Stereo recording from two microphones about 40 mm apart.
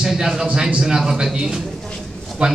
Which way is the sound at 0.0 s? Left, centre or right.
Centre.